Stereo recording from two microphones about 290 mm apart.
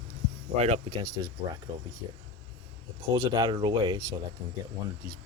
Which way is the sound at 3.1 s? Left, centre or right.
Centre.